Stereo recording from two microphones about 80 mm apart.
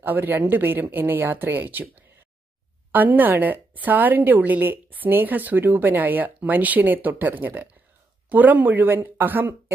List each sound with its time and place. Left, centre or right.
0.0 s a woman's voice: right